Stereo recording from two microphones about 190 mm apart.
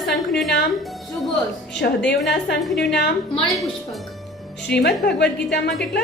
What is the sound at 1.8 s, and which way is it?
Speech, 60° left (ahead or behind).